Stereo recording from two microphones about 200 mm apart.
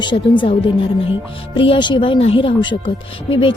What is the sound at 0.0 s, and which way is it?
Speech, 25° left (ahead or behind).